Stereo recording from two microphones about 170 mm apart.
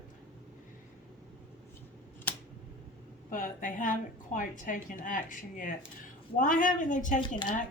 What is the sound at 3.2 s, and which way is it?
A woman's voice, 50° left (ahead or behind).